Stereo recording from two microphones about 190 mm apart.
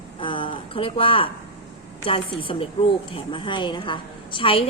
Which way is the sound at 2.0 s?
30° left (ahead or behind).